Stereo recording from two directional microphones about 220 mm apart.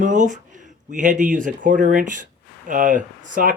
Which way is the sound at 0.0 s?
35° right (ahead or behind).